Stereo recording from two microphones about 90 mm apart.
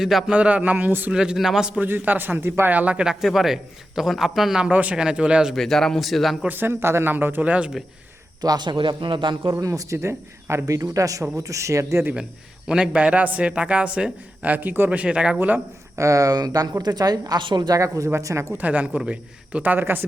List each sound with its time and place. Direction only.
0.0 s a man's voice: centre (ahead or behind)
0.3 s a man's voice: 15° right (ahead or behind)
1.1 s a man's voice: 5° right (ahead or behind)
5.5 s a man's voice: 5° left (ahead or behind)
6.5 s speech: 25° right (ahead or behind)
8.4 s a man's voice: 50° right (ahead or behind)
9.6 s speech: 35° right (ahead or behind)
12.6 s a man's voice: 10° right (ahead or behind)
16.0 s a woman's voice: 35° right (ahead or behind); by 17.7 s 50° right (ahead or behind)
17.7 s speech: 35° right (ahead or behind)
18.5 s a man's voice: 15° right (ahead or behind)